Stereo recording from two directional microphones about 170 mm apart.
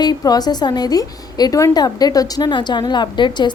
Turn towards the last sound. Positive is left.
turn(degrees=25)  # may be behind; listen again after turning